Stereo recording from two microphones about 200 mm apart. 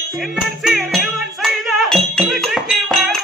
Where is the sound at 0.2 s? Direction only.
Centre (ahead or behind).